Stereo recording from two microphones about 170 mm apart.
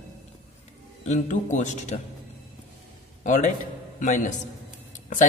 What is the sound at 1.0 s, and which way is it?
Speech, 45° left (ahead or behind).